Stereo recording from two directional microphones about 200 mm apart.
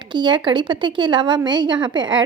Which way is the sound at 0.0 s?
25° right (ahead or behind).